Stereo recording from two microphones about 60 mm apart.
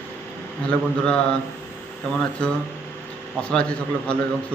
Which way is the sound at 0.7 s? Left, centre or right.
Centre.